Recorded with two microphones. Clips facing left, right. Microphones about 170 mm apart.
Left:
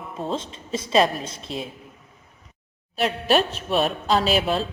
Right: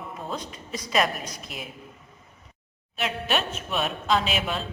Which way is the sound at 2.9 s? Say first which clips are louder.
Left 7 dB; 35° left (ahead or behind).